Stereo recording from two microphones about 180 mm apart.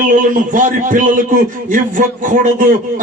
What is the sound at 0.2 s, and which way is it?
Speech, 45° right (ahead or behind).